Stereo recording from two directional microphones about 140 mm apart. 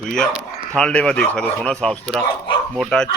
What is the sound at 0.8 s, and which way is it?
Speech, 5° left (ahead or behind).